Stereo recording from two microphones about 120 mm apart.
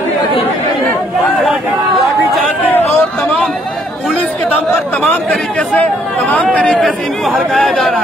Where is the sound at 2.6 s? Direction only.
15° left (ahead or behind).